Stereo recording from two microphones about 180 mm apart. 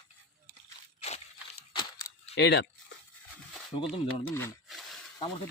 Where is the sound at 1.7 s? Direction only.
25° left (ahead or behind).